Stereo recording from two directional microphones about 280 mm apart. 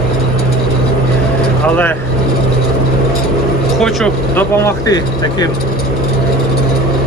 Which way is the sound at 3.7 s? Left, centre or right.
Centre.